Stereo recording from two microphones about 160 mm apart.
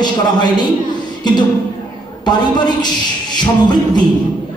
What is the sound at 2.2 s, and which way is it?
A man's voice, 25° left (ahead or behind).